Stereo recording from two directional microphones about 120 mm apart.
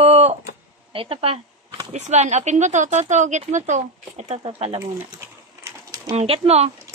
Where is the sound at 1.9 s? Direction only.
70° right (ahead or behind); by 4.8 s 55° right (ahead or behind).